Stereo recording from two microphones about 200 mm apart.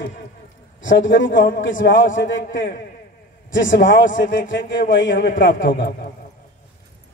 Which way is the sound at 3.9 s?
40° left (ahead or behind).